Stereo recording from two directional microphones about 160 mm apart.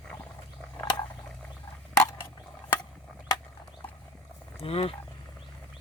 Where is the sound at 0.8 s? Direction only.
25° left (ahead or behind).